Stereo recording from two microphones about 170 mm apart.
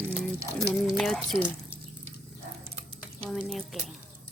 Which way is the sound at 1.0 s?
Centre (ahead or behind).